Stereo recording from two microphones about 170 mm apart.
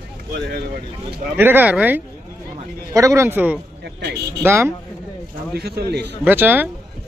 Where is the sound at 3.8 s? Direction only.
75° right (ahead or behind).